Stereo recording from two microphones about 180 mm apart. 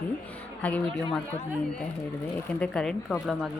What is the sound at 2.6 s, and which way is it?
Speech, 5° left (ahead or behind).